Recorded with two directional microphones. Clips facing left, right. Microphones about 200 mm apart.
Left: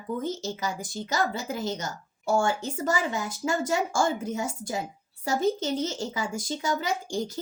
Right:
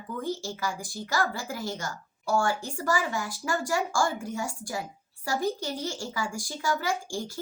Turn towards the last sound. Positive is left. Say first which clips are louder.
# left 3 dB
turn(degrees=20)  # may be behind; listen again after turning